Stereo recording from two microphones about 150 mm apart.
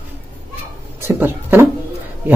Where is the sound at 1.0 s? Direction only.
15° right (ahead or behind).